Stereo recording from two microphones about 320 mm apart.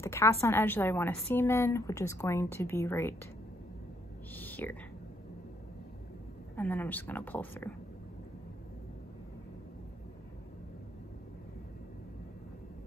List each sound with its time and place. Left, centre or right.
0.0 s a woman's voice: centre
4.4 s a sound: centre
6.5 s a woman's voice: centre